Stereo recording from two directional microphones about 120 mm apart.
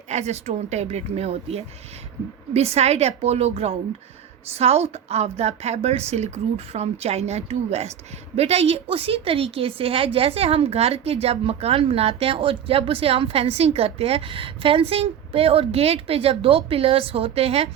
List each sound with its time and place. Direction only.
0.1 s a woman's voice: 65° right (ahead or behind)